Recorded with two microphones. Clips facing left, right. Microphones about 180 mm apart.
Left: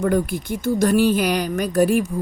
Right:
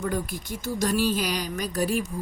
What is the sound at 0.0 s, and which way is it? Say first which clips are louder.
Speech: left 9 dB; 60° left (ahead or behind).